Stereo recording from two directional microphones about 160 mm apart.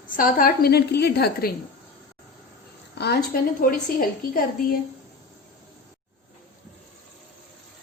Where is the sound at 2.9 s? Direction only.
90° left.